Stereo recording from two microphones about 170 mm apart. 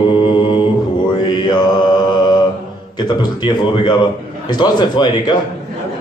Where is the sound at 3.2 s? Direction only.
25° left (ahead or behind).